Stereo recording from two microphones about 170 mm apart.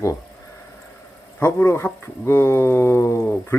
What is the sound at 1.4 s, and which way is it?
Speech, 15° left (ahead or behind).